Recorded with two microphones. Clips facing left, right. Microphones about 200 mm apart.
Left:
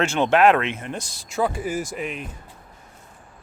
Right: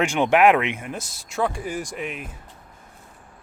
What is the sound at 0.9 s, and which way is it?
Speech, 5° right (ahead or behind).